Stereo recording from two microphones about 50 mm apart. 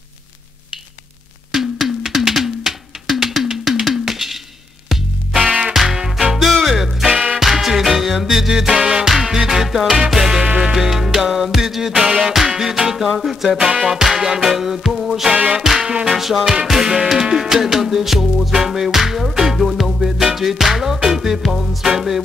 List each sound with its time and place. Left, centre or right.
1.5 s music: centre
3.8 s a sound: centre
5.6 s music: centre
13.6 s music: centre
13.8 s music: centre
15.3 s music: right
15.6 s music: centre